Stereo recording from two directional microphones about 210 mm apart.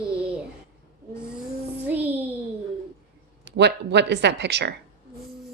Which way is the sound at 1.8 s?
10° right (ahead or behind).